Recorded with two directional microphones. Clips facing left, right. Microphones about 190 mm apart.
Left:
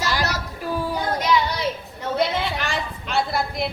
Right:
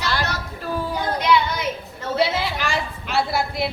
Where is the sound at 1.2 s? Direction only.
40° left (ahead or behind).